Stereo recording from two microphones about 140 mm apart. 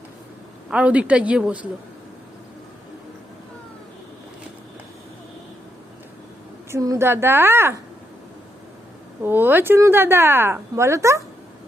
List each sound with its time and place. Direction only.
0.7 s speech: 10° right (ahead or behind)
6.7 s speech: 25° right (ahead or behind)
9.2 s speech: 15° right (ahead or behind)